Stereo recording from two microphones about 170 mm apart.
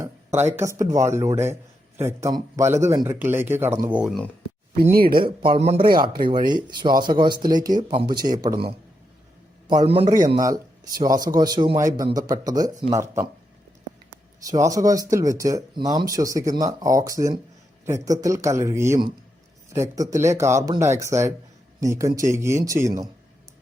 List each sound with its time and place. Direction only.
0.0 s speech: 15° right (ahead or behind)
4.8 s speech: 60° right (ahead or behind)
5.5 s a man's voice: 40° right (ahead or behind)
6.2 s speech: 25° right (ahead or behind)
9.6 s a man's voice: 30° right (ahead or behind)
10.1 s speech: 20° right (ahead or behind)
14.4 s speech: 20° right (ahead or behind)